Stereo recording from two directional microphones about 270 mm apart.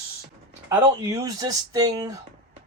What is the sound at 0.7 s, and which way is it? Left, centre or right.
Speech, centre.